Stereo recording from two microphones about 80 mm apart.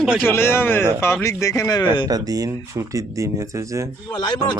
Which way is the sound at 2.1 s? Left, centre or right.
Right.